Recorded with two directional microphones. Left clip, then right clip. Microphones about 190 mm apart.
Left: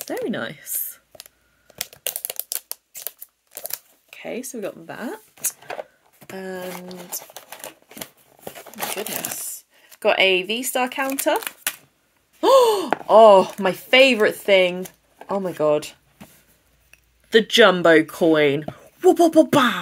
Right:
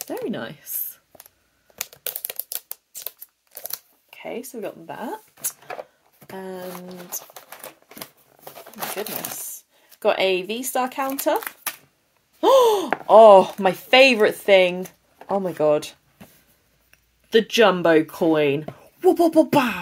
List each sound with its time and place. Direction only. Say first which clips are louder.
0.0 s speech: left 3 dB; 10° left (ahead or behind)
2.2 s a sound: left 3 dB; 5° left (ahead or behind)
3.6 s camera: left 1 dB; 20° left (ahead or behind)
6.3 s speech: left 2 dB; 10° left (ahead or behind)
7.2 s typewriter: left 1 dB; 15° left (ahead or behind)
8.5 s crumpling: left 1 dB; 10° left (ahead or behind)
9.8 s speech: left 2 dB; 5° left (ahead or behind)
12.4 s a sound: left 1 dB; 5° left (ahead or behind)
13.0 s speech: right 1 dB; centre (ahead or behind)
17.3 s speech: left 2 dB; 5° left (ahead or behind)